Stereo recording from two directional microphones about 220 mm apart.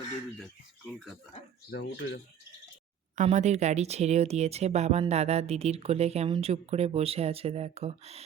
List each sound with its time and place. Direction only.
1.7 s speech: 55° left (ahead or behind)
3.2 s speech: 30° right (ahead or behind)